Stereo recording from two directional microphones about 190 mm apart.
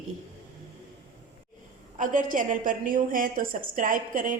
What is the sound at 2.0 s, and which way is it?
A woman's voice, 45° right (ahead or behind).